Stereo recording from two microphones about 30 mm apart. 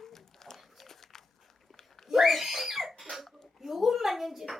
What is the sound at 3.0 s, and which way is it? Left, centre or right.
Cough, centre.